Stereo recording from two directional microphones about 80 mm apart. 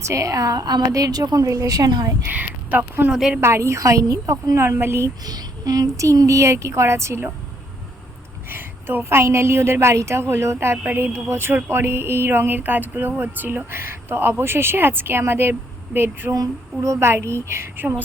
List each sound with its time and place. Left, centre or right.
0.0 s a woman's voice: right
2.3 s speech: centre
3.1 s speech: centre
3.4 s speech: right
5.2 s speech: right
8.4 s a woman's voice: right
16.3 s speech: right